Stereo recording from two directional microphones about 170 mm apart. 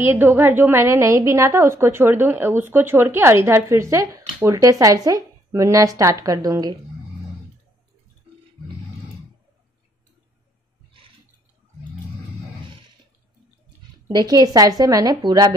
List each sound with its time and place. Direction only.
0.0 s a woman's voice: 10° right (ahead or behind)
14.0 s speech: 25° right (ahead or behind)